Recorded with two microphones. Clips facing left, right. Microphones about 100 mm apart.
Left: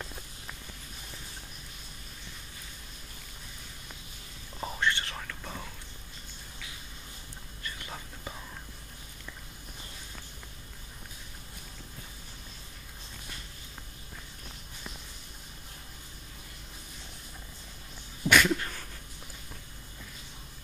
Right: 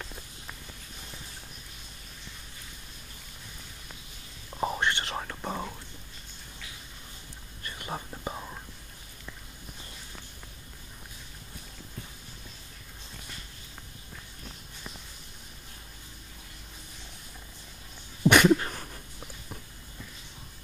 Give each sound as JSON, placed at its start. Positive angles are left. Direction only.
{"t": 4.6, "sound": "whispering", "side_deg": -25}
{"t": 7.6, "sound": "whispering", "side_deg": -35}
{"t": 18.2, "sound": "a sound", "side_deg": -25}